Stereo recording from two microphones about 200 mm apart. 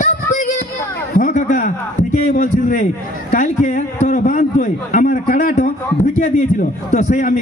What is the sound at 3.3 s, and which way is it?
A man's voice, 35° left (ahead or behind).